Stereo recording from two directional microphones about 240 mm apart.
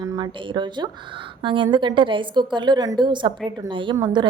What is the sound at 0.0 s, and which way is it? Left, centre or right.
A woman's voice, centre.